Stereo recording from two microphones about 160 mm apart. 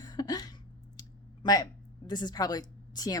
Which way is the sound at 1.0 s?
25° left (ahead or behind).